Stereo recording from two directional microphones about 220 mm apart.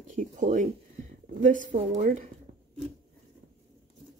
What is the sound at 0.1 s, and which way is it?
Speech, 35° right (ahead or behind).